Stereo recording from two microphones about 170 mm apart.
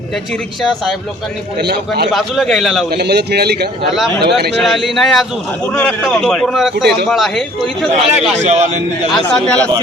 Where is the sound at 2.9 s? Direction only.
75° right (ahead or behind).